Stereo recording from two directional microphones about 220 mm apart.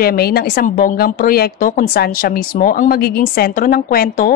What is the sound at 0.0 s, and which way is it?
Speech, 45° left (ahead or behind).